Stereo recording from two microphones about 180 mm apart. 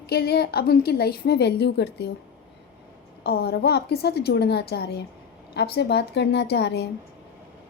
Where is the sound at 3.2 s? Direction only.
60° left (ahead or behind).